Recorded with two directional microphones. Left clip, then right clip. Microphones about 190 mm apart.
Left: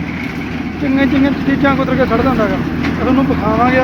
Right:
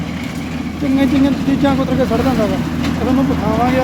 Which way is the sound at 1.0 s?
20° right (ahead or behind).